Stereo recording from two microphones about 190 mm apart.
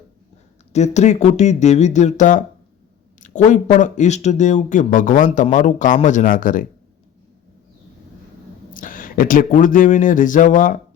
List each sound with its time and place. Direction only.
0.7 s speech: 35° left (ahead or behind)
8.7 s speech: 45° left (ahead or behind)